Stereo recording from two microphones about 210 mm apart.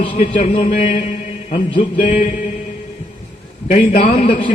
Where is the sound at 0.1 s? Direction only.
40° left (ahead or behind).